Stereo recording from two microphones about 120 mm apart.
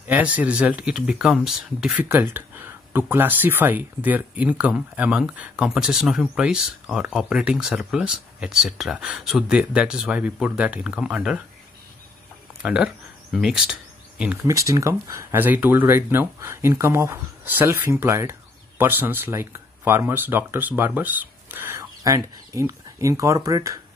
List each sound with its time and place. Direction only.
0.0 s speech: 10° right (ahead or behind)
12.6 s speech: 5° right (ahead or behind)
14.4 s speech: 25° right (ahead or behind)